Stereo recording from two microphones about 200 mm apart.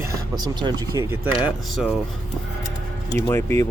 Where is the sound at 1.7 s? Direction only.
5° right (ahead or behind).